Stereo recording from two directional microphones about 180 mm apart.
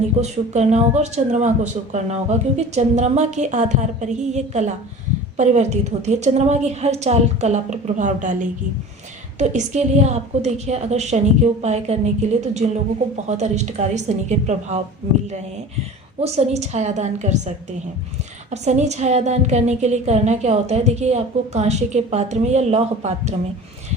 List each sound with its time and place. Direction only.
0.2 s a woman's voice: 40° right (ahead or behind)
16.2 s a woman's voice: 35° right (ahead or behind)
18.5 s a woman's voice: 40° right (ahead or behind)